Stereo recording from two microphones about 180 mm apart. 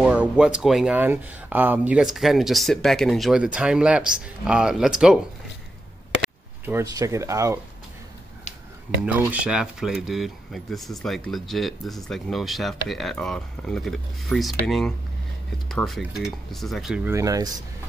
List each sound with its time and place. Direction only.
0.0 s speech: 5° right (ahead or behind)
6.6 s speech: 15° right (ahead or behind)
9.0 s speech: 10° right (ahead or behind)
17.1 s speech: 20° right (ahead or behind)